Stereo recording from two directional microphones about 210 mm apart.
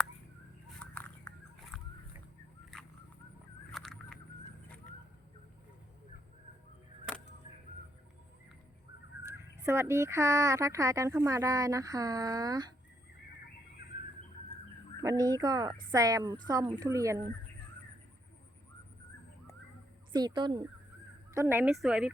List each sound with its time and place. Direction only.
0.8 s a sound: 5° left (ahead or behind)
3.7 s fowl: centre (ahead or behind)
9.6 s speech: 15° right (ahead or behind)
15.0 s speech: 15° right (ahead or behind)
20.1 s speech: 20° right (ahead or behind); by 22.1 s 5° right (ahead or behind)